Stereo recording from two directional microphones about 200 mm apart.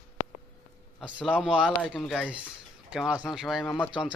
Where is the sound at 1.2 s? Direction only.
5° right (ahead or behind).